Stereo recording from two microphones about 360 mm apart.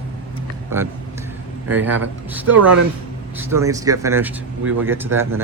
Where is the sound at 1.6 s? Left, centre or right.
Centre.